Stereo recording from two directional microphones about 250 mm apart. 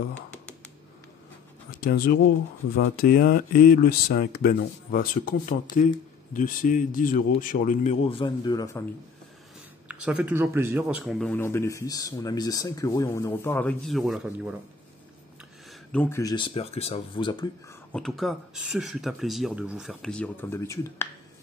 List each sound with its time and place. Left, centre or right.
1.8 s speech: left; by 8.8 s centre
9.8 s speech: centre
15.9 s speech: centre
17.9 s speech: centre